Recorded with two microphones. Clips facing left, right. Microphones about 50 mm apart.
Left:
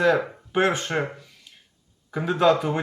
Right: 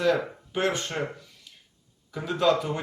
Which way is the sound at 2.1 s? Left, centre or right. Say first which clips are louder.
Left 4 dB; left.